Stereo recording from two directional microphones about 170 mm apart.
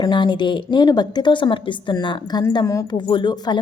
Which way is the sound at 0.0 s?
25° left (ahead or behind).